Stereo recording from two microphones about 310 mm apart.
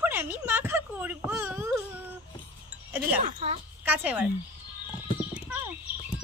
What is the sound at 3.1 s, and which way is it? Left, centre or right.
Speech, right.